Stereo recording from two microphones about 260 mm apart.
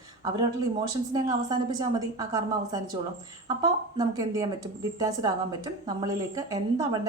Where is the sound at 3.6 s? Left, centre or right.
Centre.